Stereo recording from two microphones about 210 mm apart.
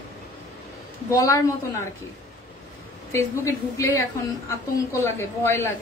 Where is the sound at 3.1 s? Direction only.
15° left (ahead or behind).